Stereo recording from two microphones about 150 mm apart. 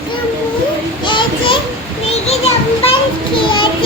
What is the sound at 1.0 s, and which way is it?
Speech, 30° left (ahead or behind).